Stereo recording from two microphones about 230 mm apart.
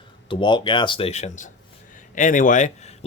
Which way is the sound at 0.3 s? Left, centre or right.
Left.